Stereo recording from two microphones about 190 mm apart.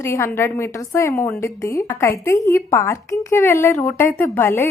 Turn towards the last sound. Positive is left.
turn(degrees=10)  # may be behind; listen again after turning